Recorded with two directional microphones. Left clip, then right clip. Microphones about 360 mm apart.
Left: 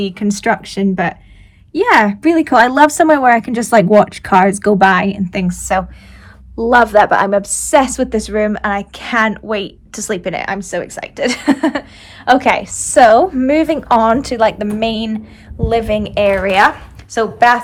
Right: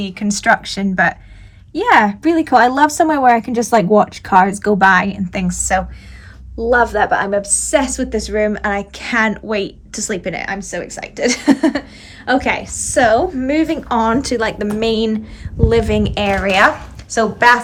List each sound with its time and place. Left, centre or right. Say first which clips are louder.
0.0 s a woman's voice: left 1 dB; centre